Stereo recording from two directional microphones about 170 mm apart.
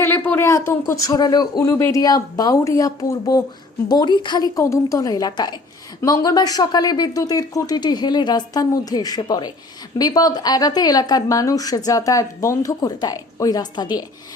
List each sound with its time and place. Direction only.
0.0 s a woman's voice: 10° left (ahead or behind)